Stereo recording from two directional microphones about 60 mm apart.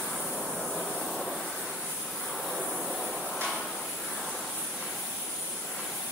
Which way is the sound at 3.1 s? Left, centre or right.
Centre.